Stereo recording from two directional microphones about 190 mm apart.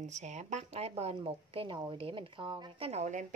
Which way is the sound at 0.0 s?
40° right (ahead or behind).